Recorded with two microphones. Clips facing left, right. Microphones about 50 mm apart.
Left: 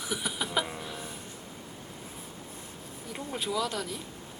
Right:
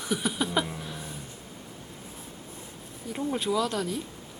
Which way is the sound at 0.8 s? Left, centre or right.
Centre.